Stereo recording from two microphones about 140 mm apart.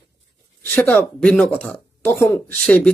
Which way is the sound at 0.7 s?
10° left (ahead or behind).